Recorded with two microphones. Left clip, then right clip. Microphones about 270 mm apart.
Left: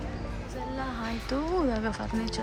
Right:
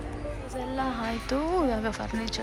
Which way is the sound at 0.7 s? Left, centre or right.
Centre.